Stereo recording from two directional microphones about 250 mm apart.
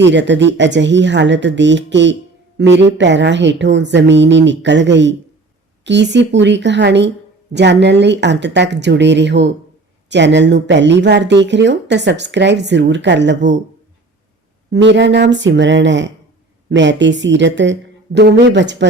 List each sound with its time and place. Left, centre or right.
0.0 s speech: right
14.7 s speech: right